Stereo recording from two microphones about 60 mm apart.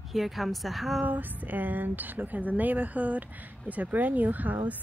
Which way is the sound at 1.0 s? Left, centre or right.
Right.